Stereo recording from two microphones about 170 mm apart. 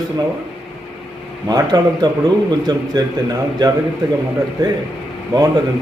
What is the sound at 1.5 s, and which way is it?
A man's voice, 25° right (ahead or behind).